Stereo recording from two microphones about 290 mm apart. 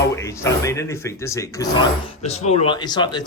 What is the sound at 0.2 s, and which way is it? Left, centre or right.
Speech, centre.